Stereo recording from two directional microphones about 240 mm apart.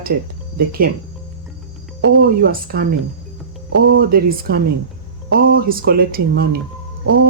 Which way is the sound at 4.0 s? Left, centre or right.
Right.